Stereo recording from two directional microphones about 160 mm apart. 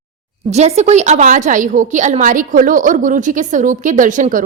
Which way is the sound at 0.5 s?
45° right (ahead or behind).